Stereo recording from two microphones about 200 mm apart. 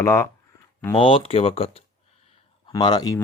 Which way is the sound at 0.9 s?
25° left (ahead or behind).